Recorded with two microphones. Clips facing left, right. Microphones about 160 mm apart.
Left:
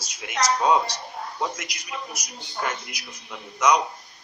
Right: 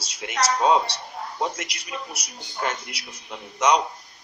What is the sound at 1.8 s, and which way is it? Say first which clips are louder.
Speech: even; 30° right (ahead or behind).